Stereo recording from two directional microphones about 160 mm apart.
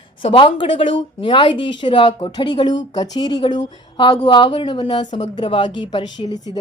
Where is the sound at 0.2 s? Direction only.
35° left (ahead or behind).